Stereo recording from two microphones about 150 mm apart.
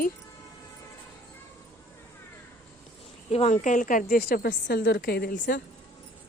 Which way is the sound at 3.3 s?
45° left (ahead or behind).